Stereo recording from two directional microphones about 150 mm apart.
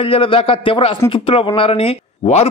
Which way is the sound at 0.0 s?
35° left (ahead or behind).